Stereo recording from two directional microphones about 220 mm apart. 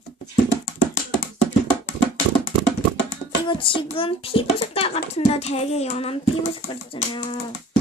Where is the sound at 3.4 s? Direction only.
25° left (ahead or behind).